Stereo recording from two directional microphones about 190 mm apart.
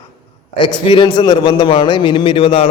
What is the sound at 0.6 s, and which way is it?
A man's voice, 25° left (ahead or behind).